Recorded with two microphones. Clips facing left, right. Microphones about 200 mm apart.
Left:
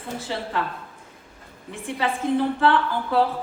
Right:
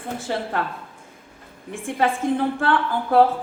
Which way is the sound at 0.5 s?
50° right (ahead or behind).